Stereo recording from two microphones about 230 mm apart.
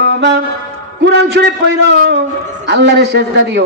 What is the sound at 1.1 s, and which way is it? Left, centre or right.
A man's voice, right.